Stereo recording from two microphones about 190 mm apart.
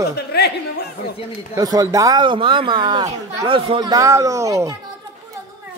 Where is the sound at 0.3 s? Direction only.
60° left (ahead or behind).